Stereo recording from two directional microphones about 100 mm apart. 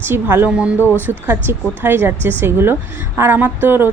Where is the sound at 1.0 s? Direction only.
20° right (ahead or behind).